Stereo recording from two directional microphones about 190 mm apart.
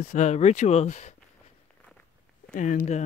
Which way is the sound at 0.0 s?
40° left (ahead or behind).